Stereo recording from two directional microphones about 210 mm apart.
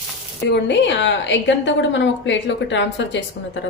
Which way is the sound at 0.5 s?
60° left (ahead or behind).